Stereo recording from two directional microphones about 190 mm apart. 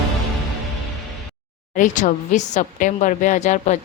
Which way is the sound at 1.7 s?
40° left (ahead or behind).